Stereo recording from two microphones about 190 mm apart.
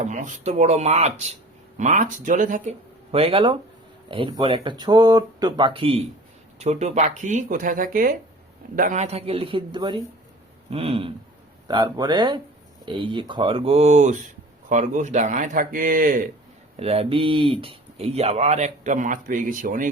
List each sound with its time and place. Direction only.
0.0 s a man's voice: 40° right (ahead or behind)
16.7 s speech: 30° right (ahead or behind)